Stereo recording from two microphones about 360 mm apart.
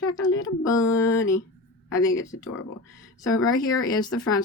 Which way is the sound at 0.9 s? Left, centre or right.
Centre.